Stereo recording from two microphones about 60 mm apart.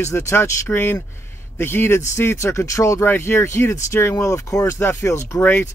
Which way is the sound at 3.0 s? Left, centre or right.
Left.